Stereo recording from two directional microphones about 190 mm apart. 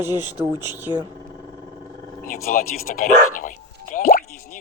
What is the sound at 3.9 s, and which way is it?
Drip, 50° left (ahead or behind).